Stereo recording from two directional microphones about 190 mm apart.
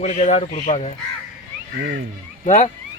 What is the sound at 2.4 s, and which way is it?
Speech, 40° left (ahead or behind).